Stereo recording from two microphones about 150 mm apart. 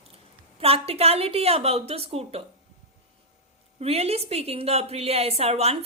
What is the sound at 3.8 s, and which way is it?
A woman's voice, 45° right (ahead or behind).